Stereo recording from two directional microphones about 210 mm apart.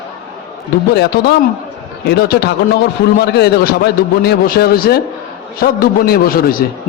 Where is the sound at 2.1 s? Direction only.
50° left (ahead or behind).